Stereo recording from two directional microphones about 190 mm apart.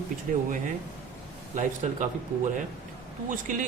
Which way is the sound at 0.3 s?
45° right (ahead or behind).